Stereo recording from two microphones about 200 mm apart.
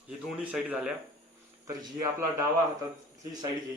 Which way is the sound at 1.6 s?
15° right (ahead or behind).